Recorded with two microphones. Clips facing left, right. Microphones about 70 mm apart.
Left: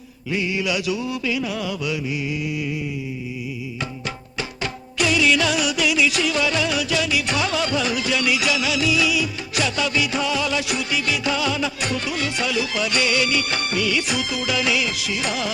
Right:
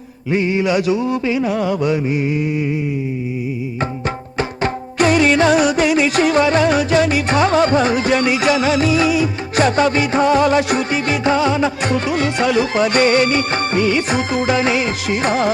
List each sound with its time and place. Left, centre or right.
0.3 s mantra: right
4.4 s music: right